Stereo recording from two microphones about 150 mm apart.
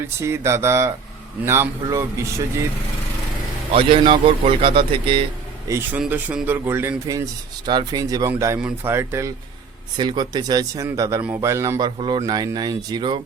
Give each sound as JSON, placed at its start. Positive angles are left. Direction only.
{"t": 0.2, "sound": "speech", "side_deg": -15}
{"t": 3.8, "sound": "a man's voice", "side_deg": -35}
{"t": 5.6, "sound": "speech", "side_deg": -20}
{"t": 7.7, "sound": "speech", "side_deg": -30}
{"t": 10.0, "sound": "speech", "side_deg": -30}
{"t": 11.9, "sound": "speech", "side_deg": -35}